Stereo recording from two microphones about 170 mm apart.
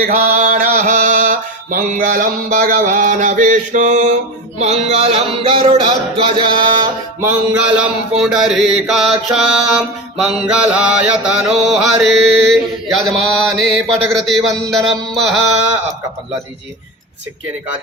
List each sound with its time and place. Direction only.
0.0 s mantra: 50° right (ahead or behind)
4.6 s speech: 40° right (ahead or behind); by 7.2 s 25° right (ahead or behind)
7.2 s mantra: 5° right (ahead or behind)